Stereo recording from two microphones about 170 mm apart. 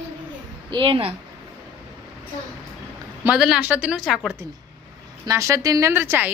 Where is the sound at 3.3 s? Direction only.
5° right (ahead or behind).